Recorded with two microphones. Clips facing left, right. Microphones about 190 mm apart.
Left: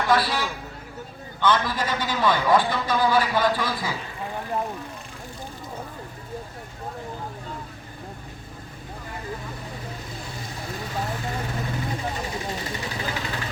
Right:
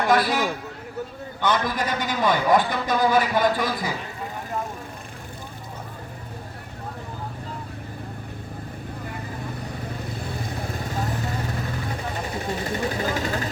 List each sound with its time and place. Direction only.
0.2 s a man's voice: 45° right (ahead or behind)
1.4 s a man's voice: 15° right (ahead or behind)
10.2 s vehicle: 55° right (ahead or behind)
12.2 s vehicle: 50° right (ahead or behind)